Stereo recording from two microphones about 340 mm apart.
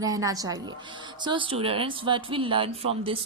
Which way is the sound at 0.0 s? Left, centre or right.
Centre.